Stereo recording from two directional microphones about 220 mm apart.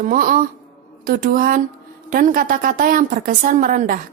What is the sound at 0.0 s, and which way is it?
A woman's voice, 35° right (ahead or behind).